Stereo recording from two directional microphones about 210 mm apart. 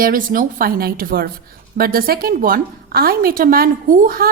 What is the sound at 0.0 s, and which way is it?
A woman's voice, 40° right (ahead or behind).